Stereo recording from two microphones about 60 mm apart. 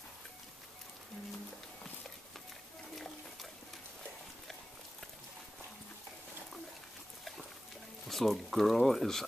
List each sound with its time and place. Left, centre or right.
8.1 s speech: centre